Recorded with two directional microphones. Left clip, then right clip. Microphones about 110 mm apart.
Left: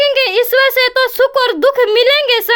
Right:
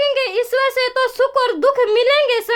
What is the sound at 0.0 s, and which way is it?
Speech, 25° left (ahead or behind).